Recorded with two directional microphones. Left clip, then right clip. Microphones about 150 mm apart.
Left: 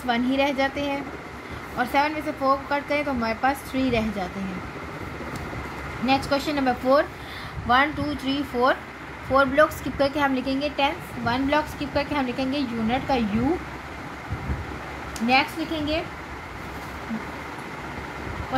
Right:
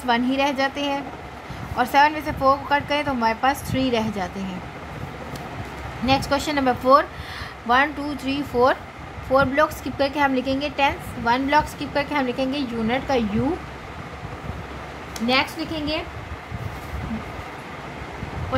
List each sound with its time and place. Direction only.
0.0 s a woman's voice: 20° right (ahead or behind)
6.0 s a woman's voice: 30° right (ahead or behind)